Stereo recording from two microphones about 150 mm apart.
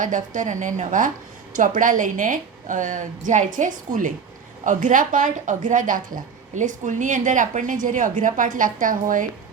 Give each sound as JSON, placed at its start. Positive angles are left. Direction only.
{"t": 0.0, "sound": "speech", "side_deg": -60}